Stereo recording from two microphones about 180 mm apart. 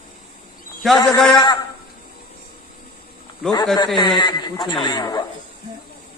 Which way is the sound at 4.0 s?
25° left (ahead or behind).